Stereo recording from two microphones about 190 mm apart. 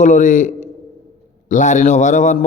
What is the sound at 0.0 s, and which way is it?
A man's voice, 40° left (ahead or behind).